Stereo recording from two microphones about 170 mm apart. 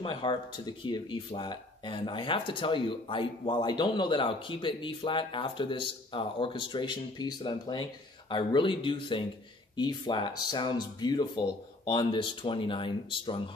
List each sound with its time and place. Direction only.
0.0 s speech: 30° left (ahead or behind)